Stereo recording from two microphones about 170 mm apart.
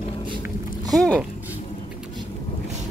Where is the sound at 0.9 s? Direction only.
5° left (ahead or behind).